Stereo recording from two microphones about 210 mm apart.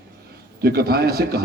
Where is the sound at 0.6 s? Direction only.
50° right (ahead or behind).